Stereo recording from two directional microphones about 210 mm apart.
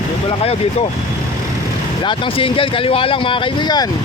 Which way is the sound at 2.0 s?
25° left (ahead or behind).